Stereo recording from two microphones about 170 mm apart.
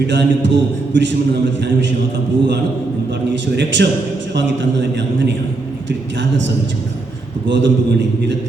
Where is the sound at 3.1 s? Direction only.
90° right.